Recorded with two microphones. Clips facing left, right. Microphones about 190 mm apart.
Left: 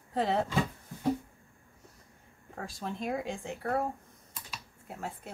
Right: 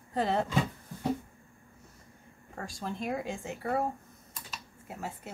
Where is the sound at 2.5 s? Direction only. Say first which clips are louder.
Even; centre (ahead or behind).